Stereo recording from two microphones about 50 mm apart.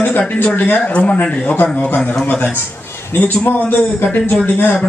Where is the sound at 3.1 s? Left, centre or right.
Left.